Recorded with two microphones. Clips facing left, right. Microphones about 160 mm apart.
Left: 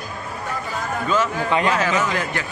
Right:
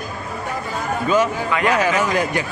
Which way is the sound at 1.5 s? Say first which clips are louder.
Left 2 dB; 30° left (ahead or behind).